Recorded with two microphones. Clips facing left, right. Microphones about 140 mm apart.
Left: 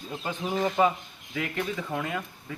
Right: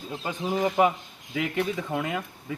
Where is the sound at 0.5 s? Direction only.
15° right (ahead or behind).